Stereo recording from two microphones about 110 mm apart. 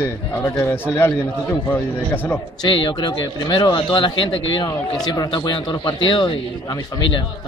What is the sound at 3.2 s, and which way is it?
Speech, 40° left (ahead or behind).